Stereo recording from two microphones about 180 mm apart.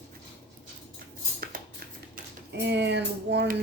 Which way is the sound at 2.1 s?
70° right (ahead or behind).